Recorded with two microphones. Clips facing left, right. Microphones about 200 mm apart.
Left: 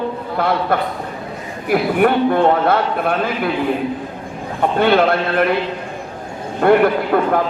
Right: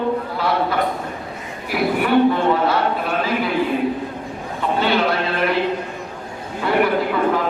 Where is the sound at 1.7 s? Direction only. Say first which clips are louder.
Left 2 dB; 55° left (ahead or behind).